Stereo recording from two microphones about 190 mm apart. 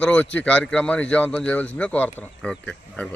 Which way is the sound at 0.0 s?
5° left (ahead or behind).